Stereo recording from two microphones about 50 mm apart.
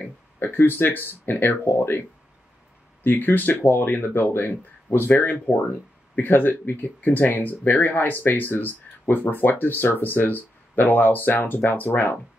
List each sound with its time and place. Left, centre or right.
0.4 s speech: left